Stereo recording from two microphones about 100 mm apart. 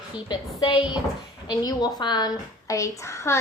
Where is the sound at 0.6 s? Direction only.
65° left (ahead or behind).